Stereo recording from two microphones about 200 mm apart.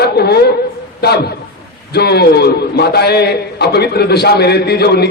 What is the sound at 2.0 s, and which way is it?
A man's voice, 55° left (ahead or behind).